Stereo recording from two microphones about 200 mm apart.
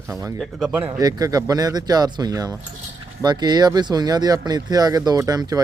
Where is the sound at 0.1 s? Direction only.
15° right (ahead or behind).